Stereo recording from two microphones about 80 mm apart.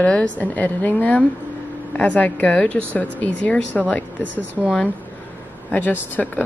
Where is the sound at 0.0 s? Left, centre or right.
Centre.